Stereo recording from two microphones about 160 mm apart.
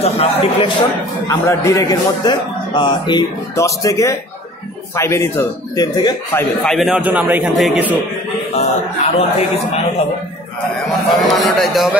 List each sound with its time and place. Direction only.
0.0 s speech: 40° left (ahead or behind)
1.2 s a man's voice: 15° left (ahead or behind)
6.3 s a man's voice: 5° left (ahead or behind)
8.5 s speech: 40° left (ahead or behind)
11.3 s a man's voice: centre (ahead or behind)